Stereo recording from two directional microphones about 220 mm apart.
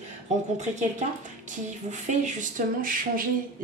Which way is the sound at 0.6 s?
35° right (ahead or behind).